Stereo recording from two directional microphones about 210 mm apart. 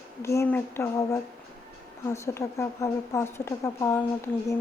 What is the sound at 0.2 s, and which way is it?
A woman's voice, 10° left (ahead or behind).